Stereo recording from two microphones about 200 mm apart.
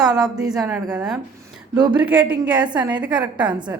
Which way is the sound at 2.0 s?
10° right (ahead or behind).